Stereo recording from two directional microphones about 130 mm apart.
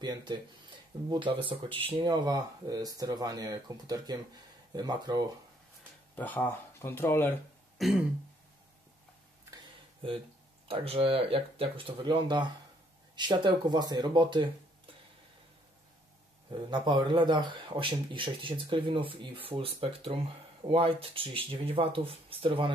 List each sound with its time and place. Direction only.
0.0 s a man's voice: 35° right (ahead or behind)
2.2 s a man's voice: 30° right (ahead or behind)
6.1 s speech: 15° left (ahead or behind)
7.8 s throat clearing: centre (ahead or behind)
10.7 s a man's voice: 45° right (ahead or behind)
16.4 s a man's voice: 35° right (ahead or behind)